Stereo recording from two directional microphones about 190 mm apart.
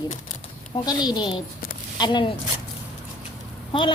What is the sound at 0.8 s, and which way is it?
Speech, 20° left (ahead or behind).